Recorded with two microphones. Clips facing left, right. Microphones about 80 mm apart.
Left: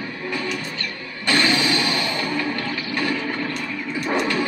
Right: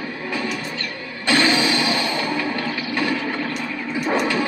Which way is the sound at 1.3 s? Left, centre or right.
Right.